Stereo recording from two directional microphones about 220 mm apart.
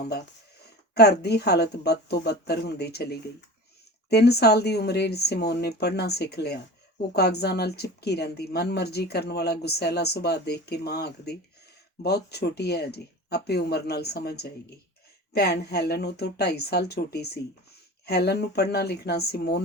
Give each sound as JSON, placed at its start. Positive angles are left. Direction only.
{"t": 0.9, "sound": "a woman's voice", "side_deg": 45}